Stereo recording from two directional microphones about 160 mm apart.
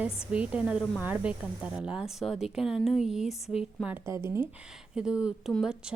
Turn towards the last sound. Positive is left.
turn(degrees=-5)  # may be behind; listen again after turning